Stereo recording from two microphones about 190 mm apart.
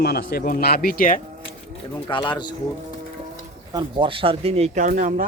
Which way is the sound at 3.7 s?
25° right (ahead or behind).